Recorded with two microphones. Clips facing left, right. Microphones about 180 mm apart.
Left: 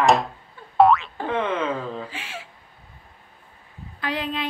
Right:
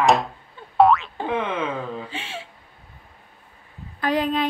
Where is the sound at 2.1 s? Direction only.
25° right (ahead or behind).